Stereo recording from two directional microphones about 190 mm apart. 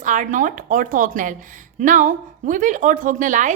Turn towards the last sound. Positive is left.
turn(degrees=-40)  # may be behind; listen again after turning